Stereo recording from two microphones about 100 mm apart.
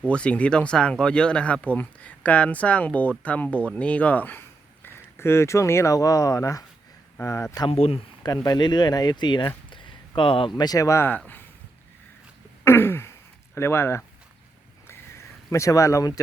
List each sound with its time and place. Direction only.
0.1 s speech: 10° left (ahead or behind); by 7.6 s 30° left (ahead or behind)
7.7 s speech: 85° left
8.2 s speech: 45° left (ahead or behind)
9.6 s a sound: 55° left (ahead or behind)
10.6 s speech: 35° left (ahead or behind)
12.6 s throat clearing: 25° left (ahead or behind)
15.4 s speech: 35° left (ahead or behind)